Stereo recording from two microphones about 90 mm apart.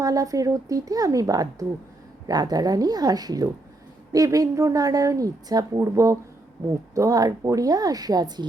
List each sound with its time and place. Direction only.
0.0 s a woman's voice: 40° right (ahead or behind)